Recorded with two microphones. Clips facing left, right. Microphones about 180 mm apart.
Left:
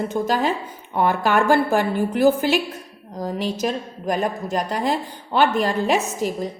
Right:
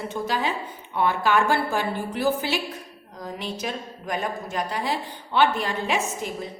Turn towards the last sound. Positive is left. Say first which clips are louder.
# left 6 dB
turn(degrees=40)  # may be behind; listen again after turning